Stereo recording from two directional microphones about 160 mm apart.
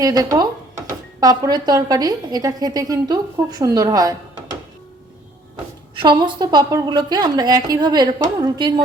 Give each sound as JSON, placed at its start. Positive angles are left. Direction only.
{"t": 0.0, "sound": "a woman's voice", "side_deg": -20}
{"t": 6.0, "sound": "a woman's voice", "side_deg": -30}